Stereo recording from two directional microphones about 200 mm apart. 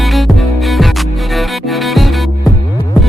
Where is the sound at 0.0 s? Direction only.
Centre (ahead or behind).